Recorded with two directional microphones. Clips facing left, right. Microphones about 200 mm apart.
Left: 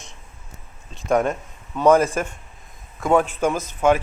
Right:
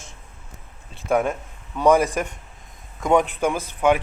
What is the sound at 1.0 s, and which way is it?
Speech, 5° right (ahead or behind).